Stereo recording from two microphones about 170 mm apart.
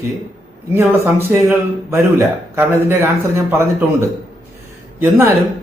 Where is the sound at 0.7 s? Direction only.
15° right (ahead or behind).